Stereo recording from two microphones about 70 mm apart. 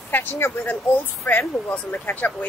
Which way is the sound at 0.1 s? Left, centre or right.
Left.